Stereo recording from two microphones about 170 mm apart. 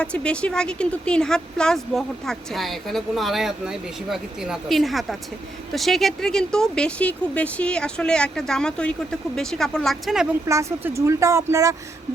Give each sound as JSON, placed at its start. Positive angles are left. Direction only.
{"t": 0.0, "sound": "a woman's voice", "side_deg": 5}
{"t": 10.4, "sound": "speech", "side_deg": -20}